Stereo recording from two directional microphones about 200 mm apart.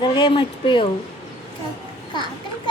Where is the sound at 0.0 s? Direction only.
25° left (ahead or behind).